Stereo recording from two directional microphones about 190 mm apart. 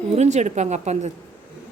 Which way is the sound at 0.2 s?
35° right (ahead or behind).